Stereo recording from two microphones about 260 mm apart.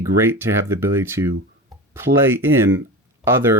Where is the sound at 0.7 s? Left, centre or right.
Centre.